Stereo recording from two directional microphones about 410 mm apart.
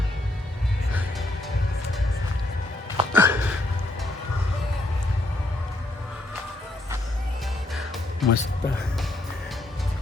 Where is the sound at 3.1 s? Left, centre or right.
Centre.